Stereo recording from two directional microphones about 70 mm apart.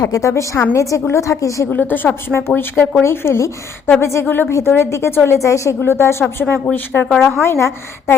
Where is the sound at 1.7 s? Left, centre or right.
Left.